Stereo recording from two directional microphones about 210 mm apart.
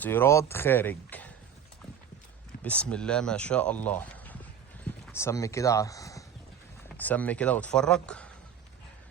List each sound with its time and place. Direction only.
0.0 s speech: 10° left (ahead or behind)
2.6 s speech: 5° left (ahead or behind)